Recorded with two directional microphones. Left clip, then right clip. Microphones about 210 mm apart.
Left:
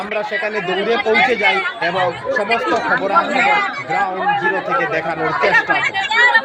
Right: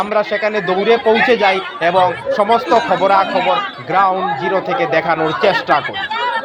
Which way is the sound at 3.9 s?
15° right (ahead or behind).